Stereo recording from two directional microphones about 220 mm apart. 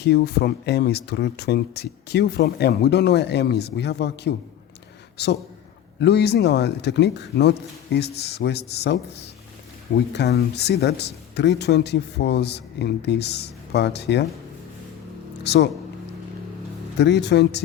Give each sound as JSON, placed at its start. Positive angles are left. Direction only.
{"t": 0.0, "sound": "speech", "side_deg": 50}
{"t": 15.4, "sound": "speech", "side_deg": 50}
{"t": 17.0, "sound": "speech", "side_deg": 50}